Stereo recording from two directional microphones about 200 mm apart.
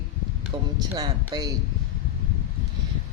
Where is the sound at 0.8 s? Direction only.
20° right (ahead or behind).